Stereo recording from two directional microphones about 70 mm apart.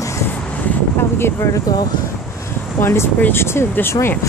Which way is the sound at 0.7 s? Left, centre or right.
Left.